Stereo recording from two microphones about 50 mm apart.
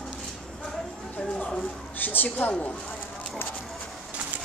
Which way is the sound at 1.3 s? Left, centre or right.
Centre.